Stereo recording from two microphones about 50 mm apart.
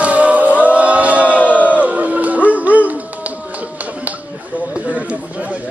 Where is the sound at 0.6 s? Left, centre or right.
Right.